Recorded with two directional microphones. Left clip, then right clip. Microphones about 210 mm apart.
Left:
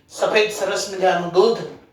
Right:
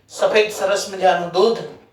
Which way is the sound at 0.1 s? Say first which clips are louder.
Right 2 dB; 15° right (ahead or behind).